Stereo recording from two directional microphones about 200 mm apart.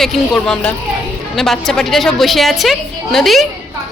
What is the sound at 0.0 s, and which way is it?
A woman's voice, centre (ahead or behind).